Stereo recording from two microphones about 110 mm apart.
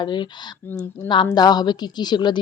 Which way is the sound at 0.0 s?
45° left (ahead or behind).